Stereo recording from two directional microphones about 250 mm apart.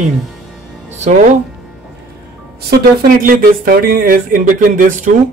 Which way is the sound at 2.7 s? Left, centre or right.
Right.